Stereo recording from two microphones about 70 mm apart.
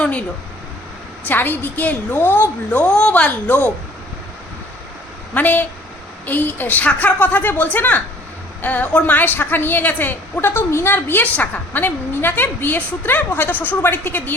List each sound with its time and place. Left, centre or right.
0.0 s a sound: centre
1.3 s a woman's voice: left
5.3 s a woman's voice: left